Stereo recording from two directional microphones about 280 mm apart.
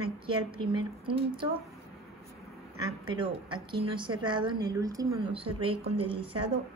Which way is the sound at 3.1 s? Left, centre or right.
Centre.